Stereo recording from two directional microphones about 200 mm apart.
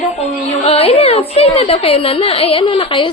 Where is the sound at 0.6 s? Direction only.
30° left (ahead or behind).